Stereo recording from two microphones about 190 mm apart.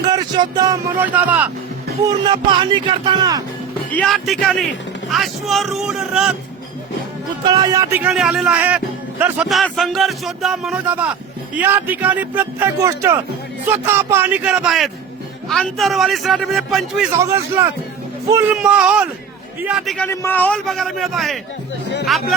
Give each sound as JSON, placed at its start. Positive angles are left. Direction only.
{"t": 0.1, "sound": "speech", "side_deg": -20}
{"t": 1.0, "sound": "speech", "side_deg": -10}
{"t": 2.0, "sound": "a man's voice", "side_deg": -25}
{"t": 3.9, "sound": "speech", "side_deg": 0}
{"t": 7.4, "sound": "speech", "side_deg": -20}
{"t": 17.1, "sound": "speech", "side_deg": -15}